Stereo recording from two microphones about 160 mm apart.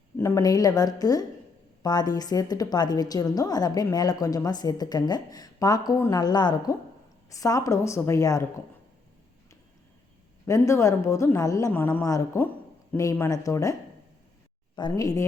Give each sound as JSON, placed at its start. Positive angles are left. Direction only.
{"t": 0.2, "sound": "a woman's voice", "side_deg": 20}
{"t": 10.4, "sound": "a woman's voice", "side_deg": 20}
{"t": 14.8, "sound": "a woman's voice", "side_deg": 25}